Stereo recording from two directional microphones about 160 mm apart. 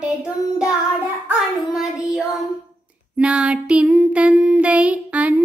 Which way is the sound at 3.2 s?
5° right (ahead or behind).